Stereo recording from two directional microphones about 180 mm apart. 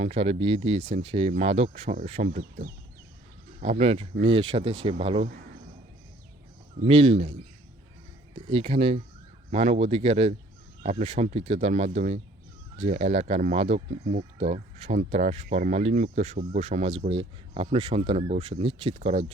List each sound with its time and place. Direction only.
0.0 s speech: 35° right (ahead or behind)
2.4 s speech: 55° right (ahead or behind)
3.6 s speech: 35° right (ahead or behind)
6.8 s speech: 30° right (ahead or behind)
8.4 s speech: 30° right (ahead or behind)
14.3 s speech: 35° right (ahead or behind)